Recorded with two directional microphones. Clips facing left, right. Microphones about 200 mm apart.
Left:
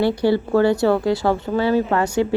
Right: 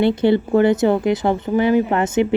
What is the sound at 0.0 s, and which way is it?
A woman's voice, 20° right (ahead or behind).